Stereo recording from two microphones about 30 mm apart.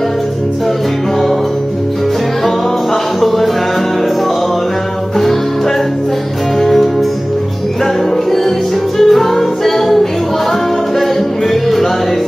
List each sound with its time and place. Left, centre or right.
3.2 s music: centre
6.6 s music: centre
8.9 s music: centre